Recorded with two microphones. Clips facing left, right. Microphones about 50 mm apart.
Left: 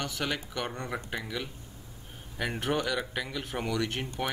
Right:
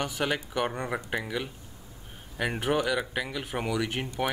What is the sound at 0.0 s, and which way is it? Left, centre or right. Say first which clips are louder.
Speech: right 4 dB; centre.